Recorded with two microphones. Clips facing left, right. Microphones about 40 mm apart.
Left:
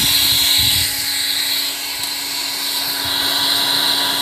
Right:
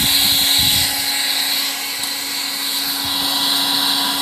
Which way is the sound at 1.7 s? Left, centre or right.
Right.